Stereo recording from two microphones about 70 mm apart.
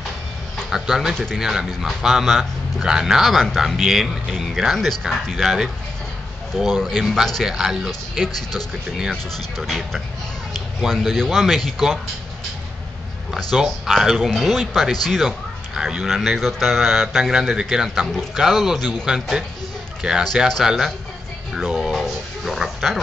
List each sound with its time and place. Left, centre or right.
0.7 s speech: centre
1.1 s speech: centre
1.4 s speech: centre
8.3 s speech: left
9.6 s speech: centre
13.3 s speech: centre
19.0 s a man's voice: centre
21.8 s music: centre